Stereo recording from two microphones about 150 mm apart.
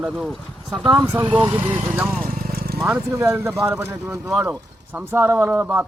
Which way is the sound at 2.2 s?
70° right (ahead or behind).